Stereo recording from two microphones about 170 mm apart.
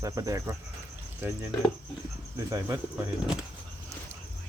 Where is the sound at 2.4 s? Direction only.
20° right (ahead or behind).